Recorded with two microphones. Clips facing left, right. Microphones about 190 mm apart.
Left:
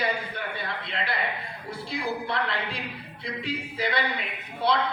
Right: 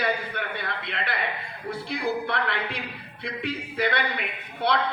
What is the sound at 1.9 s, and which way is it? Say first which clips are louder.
A man's voice: right 2 dB; 60° right (ahead or behind).